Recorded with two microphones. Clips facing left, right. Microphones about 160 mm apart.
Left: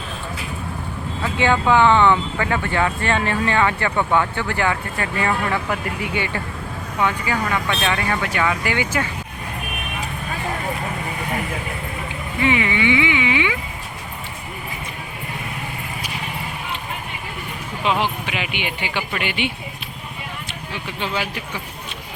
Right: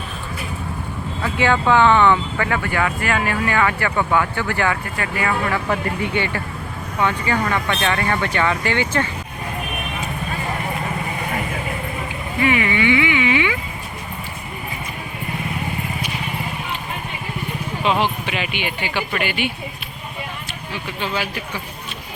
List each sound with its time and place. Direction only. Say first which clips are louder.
1.2 s speech: even; 20° left (ahead or behind)
7.0 s speech: right 1 dB; 15° left (ahead or behind)
12.4 s speech: right 1 dB; 20° left (ahead or behind)
17.8 s speech: right 1 dB; 15° right (ahead or behind)
18.3 s speech: right 1 dB; 15° left (ahead or behind)